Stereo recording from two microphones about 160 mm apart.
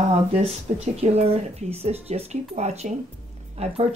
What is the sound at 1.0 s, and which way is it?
Speech, 40° right (ahead or behind).